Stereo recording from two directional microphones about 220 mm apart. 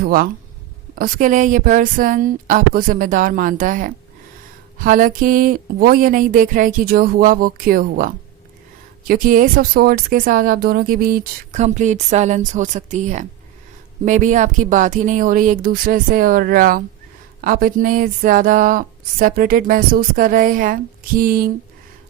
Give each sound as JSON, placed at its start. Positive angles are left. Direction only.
{"t": 0.0, "sound": "speech", "side_deg": -40}